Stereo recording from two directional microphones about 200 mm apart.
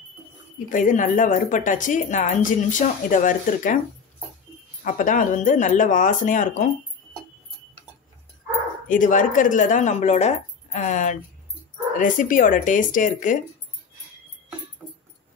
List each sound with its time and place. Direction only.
0.7 s a woman's voice: 40° left (ahead or behind)
4.8 s a woman's voice: 40° left (ahead or behind)
8.8 s a woman's voice: 40° left (ahead or behind)